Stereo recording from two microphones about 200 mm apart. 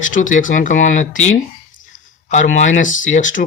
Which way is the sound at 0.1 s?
40° left (ahead or behind).